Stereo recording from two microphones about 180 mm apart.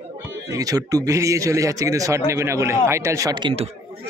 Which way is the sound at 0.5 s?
20° right (ahead or behind).